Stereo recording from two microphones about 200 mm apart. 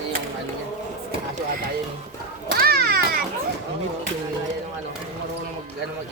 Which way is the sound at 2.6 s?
50° right (ahead or behind).